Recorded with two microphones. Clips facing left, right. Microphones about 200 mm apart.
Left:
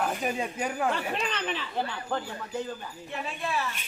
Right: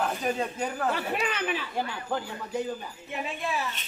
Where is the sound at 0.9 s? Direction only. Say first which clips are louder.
Right 1 dB; 10° right (ahead or behind).